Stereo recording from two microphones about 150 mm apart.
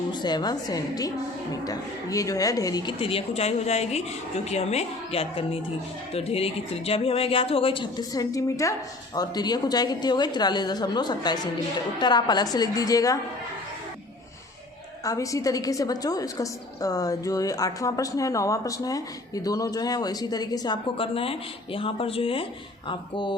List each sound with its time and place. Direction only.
0.1 s a woman's voice: 30° left (ahead or behind)
3.0 s a woman's voice: 40° left (ahead or behind); by 13.1 s 25° left (ahead or behind)
15.0 s a woman's voice: 20° left (ahead or behind)